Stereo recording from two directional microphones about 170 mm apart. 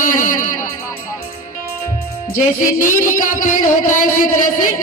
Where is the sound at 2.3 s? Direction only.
50° left (ahead or behind).